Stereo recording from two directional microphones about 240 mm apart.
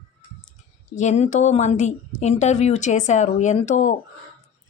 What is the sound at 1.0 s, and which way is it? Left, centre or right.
Speech, left.